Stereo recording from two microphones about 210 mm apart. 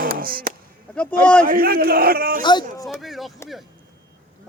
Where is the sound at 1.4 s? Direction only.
45° right (ahead or behind).